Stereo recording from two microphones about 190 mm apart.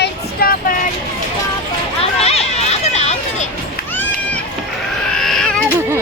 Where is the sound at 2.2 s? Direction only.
35° left (ahead or behind).